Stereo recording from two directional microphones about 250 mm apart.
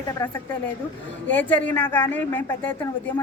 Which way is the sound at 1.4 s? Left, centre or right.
Centre.